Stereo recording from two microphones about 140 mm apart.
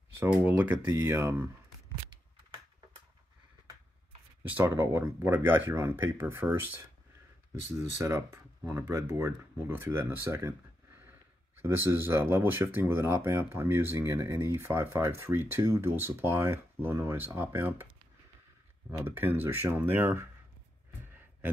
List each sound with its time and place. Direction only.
0.2 s speech: 15° right (ahead or behind)
4.4 s speech: 15° right (ahead or behind)
8.0 s speech: 20° right (ahead or behind)
11.6 s speech: 15° right (ahead or behind)
18.9 s speech: 15° right (ahead or behind)